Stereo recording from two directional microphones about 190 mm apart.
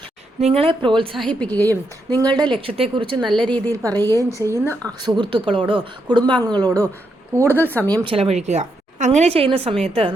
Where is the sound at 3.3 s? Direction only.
5° left (ahead or behind).